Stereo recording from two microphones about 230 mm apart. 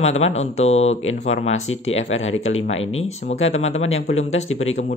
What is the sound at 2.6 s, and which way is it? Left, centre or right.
Speech, left.